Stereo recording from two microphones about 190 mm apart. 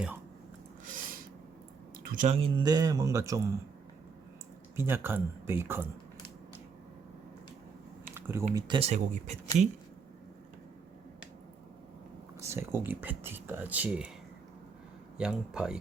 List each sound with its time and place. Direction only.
0.9 s a sound: 45° right (ahead or behind)
2.0 s speech: 40° right (ahead or behind); by 3.5 s 15° right (ahead or behind)
4.8 s speech: 10° right (ahead or behind)
8.1 s typing: 15° right (ahead or behind)
8.5 s speech: 25° right (ahead or behind)
8.9 s speech: 40° right (ahead or behind)
12.4 s speech: 15° right (ahead or behind)
15.2 s speech: 5° right (ahead or behind)